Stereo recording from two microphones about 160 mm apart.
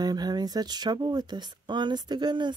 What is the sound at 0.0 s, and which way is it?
Speech, 25° right (ahead or behind).